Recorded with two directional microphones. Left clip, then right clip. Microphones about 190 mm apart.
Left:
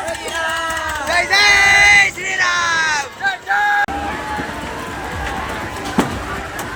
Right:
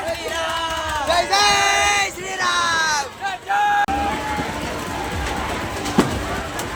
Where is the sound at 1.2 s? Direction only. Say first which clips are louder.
Left 7 dB; centre (ahead or behind).